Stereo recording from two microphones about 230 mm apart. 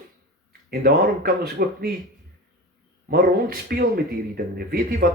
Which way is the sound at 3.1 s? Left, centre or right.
Right.